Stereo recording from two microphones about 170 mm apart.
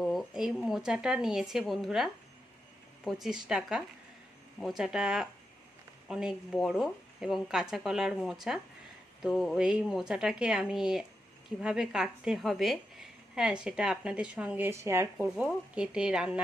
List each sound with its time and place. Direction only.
0.0 s a woman's voice: centre (ahead or behind)
3.1 s a woman's voice: centre (ahead or behind)
15.2 s a woman's voice: 5° right (ahead or behind)